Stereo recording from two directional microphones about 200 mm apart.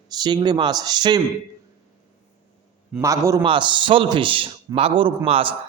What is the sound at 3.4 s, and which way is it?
Speech, 25° right (ahead or behind).